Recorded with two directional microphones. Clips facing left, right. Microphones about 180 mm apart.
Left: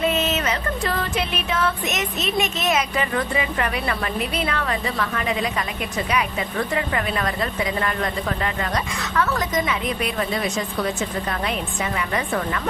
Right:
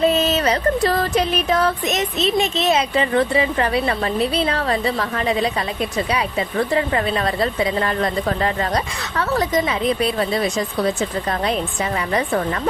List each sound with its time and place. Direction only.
0.0 s music: 35° right (ahead or behind)
6.7 s music: 30° right (ahead or behind)